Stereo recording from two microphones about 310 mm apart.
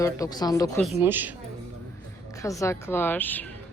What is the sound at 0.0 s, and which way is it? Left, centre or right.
Speech, centre.